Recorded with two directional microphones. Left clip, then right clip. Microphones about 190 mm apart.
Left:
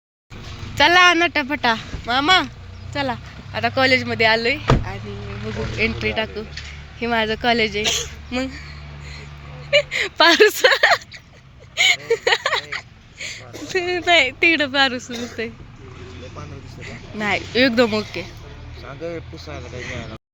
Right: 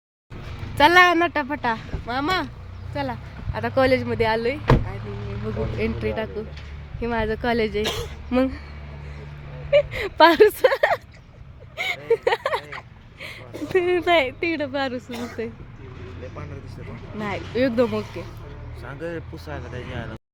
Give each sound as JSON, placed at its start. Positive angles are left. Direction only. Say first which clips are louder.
{"t": 0.8, "sound": "speech", "louder": "left 2 dB", "side_deg": -5}
{"t": 3.5, "sound": "speech", "louder": "left 3 dB", "side_deg": -10}
{"t": 5.7, "sound": "speech", "louder": "left 7 dB", "side_deg": -10}
{"t": 9.6, "sound": "speech", "louder": "left 2 dB", "side_deg": -15}
{"t": 14.3, "sound": "speech", "louder": "left 9 dB", "side_deg": 0}
{"t": 16.3, "sound": "speech", "louder": "left 1 dB", "side_deg": 10}
{"t": 18.8, "sound": "speech", "louder": "left 2 dB", "side_deg": -30}